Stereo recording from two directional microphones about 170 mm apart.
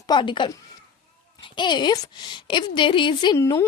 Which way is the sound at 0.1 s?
30° left (ahead or behind).